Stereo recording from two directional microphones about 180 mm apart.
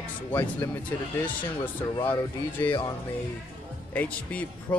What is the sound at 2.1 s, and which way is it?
Speech, 10° left (ahead or behind).